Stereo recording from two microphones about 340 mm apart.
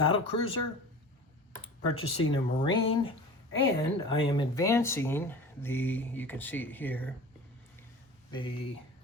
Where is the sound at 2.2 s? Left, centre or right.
Centre.